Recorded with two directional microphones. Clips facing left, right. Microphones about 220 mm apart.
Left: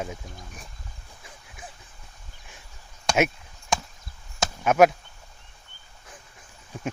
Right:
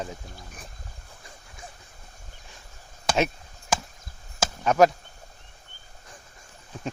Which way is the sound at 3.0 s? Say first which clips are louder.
Left 2 dB; 5° left (ahead or behind).